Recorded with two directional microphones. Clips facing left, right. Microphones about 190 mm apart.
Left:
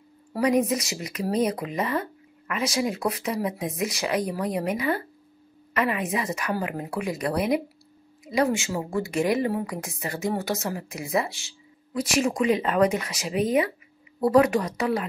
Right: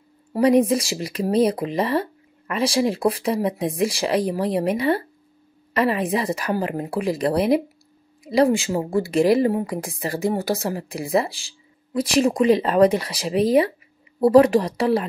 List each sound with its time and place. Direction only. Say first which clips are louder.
0.3 s speech: right 6 dB; 30° right (ahead or behind)